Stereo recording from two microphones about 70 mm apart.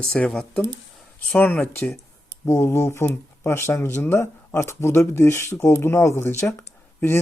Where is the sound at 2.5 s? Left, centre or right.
Left.